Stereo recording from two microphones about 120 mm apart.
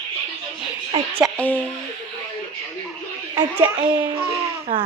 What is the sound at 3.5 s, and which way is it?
Speech, 15° right (ahead or behind).